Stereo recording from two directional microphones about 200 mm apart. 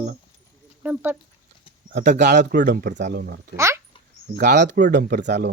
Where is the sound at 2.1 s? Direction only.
60° right (ahead or behind).